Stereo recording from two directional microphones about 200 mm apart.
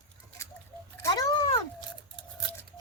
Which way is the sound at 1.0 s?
20° left (ahead or behind).